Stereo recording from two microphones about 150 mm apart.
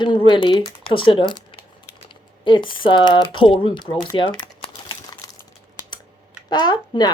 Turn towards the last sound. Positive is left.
turn(degrees=30)  # may be behind; listen again after turning